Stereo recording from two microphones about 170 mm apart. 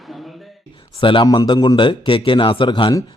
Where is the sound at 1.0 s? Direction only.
30° left (ahead or behind).